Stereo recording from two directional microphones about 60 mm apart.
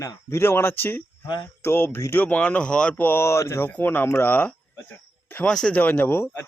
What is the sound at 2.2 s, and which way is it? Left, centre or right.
Speech, left.